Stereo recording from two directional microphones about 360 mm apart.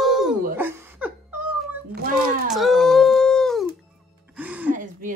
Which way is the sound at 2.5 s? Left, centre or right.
Centre.